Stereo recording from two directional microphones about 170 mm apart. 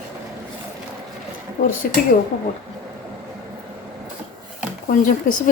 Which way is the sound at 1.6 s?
90° left.